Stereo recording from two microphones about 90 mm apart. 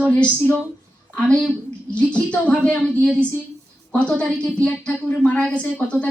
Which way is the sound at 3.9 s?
15° left (ahead or behind).